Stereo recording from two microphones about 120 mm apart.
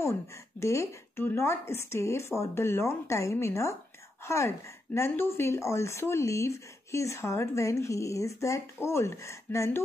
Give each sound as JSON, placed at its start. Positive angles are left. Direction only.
{"t": 0.0, "sound": "speech", "side_deg": 25}